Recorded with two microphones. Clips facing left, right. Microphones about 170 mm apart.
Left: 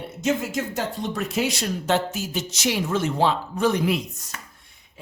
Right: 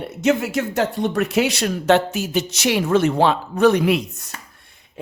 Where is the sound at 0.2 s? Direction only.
70° right (ahead or behind).